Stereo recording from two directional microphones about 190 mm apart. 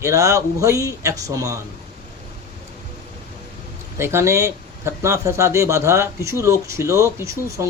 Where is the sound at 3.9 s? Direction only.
15° right (ahead or behind).